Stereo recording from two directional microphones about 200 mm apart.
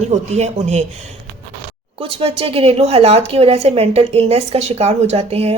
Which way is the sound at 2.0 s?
30° right (ahead or behind).